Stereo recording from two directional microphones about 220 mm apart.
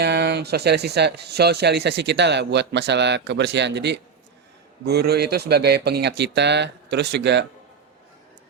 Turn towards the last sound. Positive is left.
turn(degrees=-50)  # may be behind; listen again after turning